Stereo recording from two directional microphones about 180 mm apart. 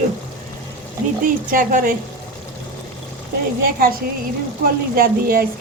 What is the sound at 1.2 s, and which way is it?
Speech, 50° right (ahead or behind).